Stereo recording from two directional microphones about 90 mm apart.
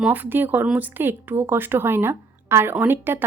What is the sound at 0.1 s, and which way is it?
A woman's voice, 20° right (ahead or behind).